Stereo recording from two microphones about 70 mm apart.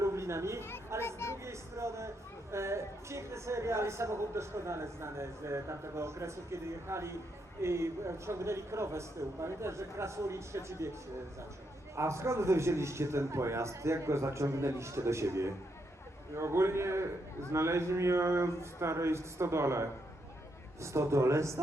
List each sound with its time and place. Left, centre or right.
0.0 s chatter: right
1.0 s speech: left
1.5 s speech: right
11.9 s a man's voice: right